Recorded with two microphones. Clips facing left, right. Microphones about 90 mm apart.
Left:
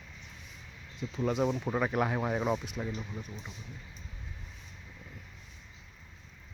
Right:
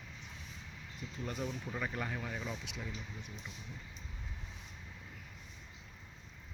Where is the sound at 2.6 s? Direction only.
45° left (ahead or behind).